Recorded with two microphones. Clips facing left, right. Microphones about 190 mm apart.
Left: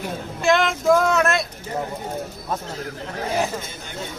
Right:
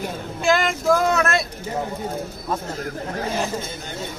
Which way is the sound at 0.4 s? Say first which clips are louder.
Left 1 dB; centre (ahead or behind).